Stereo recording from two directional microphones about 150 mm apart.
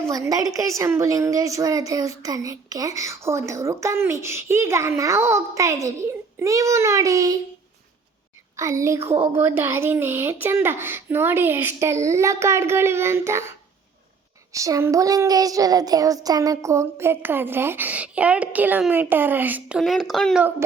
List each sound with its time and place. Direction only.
0.1 s a woman's voice: 25° right (ahead or behind)
8.5 s a woman's voice: 20° right (ahead or behind)
14.5 s a child's voice: 20° right (ahead or behind); by 20.4 s centre (ahead or behind)